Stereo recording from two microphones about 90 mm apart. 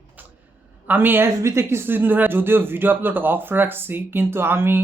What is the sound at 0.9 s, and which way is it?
Speech, 20° right (ahead or behind).